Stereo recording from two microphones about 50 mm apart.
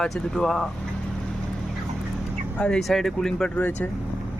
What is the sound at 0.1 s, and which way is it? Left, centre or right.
Speech, centre.